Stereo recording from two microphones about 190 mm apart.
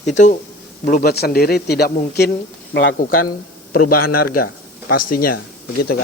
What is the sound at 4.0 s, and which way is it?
Speech, 50° left (ahead or behind).